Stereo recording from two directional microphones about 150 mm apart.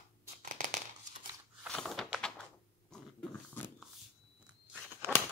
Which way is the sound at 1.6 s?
Centre (ahead or behind).